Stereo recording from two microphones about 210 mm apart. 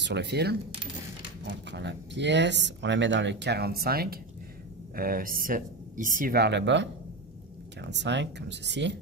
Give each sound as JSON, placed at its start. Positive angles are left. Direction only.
{"t": 0.0, "sound": "speech", "side_deg": -55}